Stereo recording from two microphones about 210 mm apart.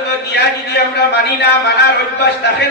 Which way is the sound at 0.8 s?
50° left (ahead or behind).